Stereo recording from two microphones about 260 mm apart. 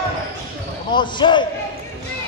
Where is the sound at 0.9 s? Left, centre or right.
Centre.